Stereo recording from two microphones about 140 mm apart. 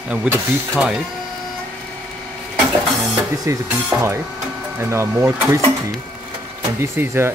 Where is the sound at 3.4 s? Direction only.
20° right (ahead or behind).